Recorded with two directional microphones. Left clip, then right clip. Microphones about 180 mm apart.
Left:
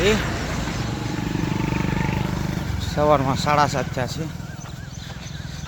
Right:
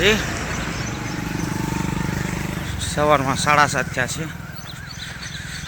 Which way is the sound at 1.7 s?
55° right (ahead or behind).